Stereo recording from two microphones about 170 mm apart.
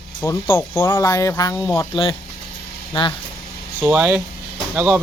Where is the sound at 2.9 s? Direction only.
30° left (ahead or behind).